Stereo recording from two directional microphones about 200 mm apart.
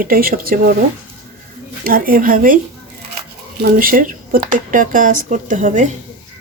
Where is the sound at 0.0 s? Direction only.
45° right (ahead or behind).